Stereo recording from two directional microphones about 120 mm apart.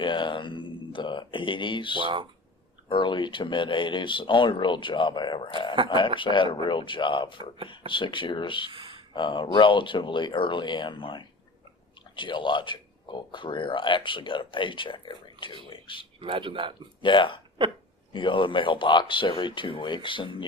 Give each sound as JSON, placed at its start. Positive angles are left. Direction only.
{"t": 0.0, "sound": "a sound", "side_deg": 40}
{"t": 2.0, "sound": "speech", "side_deg": -45}
{"t": 2.9, "sound": "speech", "side_deg": 40}
{"t": 8.7, "sound": "a sound", "side_deg": -45}
{"t": 9.1, "sound": "speech", "side_deg": 40}
{"t": 16.2, "sound": "speech", "side_deg": -45}
{"t": 17.0, "sound": "speech", "side_deg": 45}